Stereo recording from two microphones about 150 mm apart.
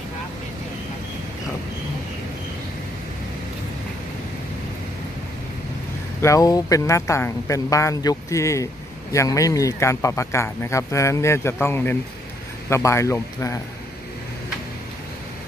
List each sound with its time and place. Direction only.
6.2 s speech: 25° left (ahead or behind)